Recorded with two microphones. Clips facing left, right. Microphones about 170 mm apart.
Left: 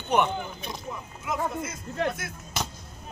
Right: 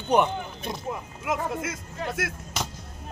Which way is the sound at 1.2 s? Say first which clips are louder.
Right 1 dB; 90° right.